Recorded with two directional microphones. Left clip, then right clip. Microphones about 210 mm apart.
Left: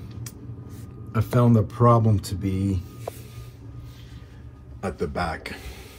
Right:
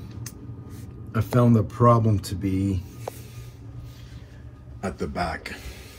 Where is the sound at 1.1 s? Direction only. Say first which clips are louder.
Even; 25° left (ahead or behind).